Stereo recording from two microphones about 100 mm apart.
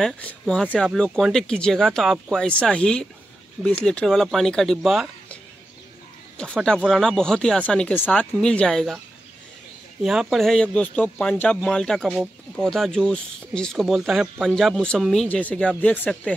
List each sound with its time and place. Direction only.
0.0 s speech: 10° left (ahead or behind)
6.3 s speech: 10° left (ahead or behind)
10.0 s speech: centre (ahead or behind); by 16.1 s 15° left (ahead or behind)